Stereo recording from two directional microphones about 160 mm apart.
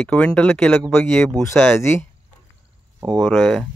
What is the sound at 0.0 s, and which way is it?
Speech, 10° left (ahead or behind).